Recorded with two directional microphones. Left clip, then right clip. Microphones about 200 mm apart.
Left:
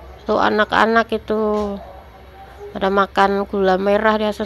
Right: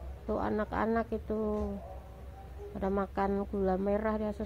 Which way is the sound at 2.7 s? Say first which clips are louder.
Left 17 dB; 15° left (ahead or behind).